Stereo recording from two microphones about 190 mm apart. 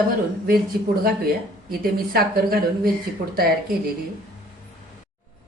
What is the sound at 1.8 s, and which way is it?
Speech, 55° right (ahead or behind).